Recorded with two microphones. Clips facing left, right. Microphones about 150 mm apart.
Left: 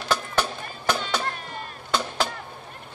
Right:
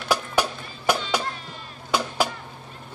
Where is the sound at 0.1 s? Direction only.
10° right (ahead or behind).